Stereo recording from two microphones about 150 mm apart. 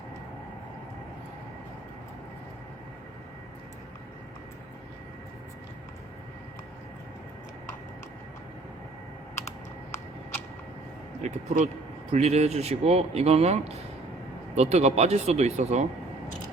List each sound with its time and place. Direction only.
11.2 s speech: 50° right (ahead or behind)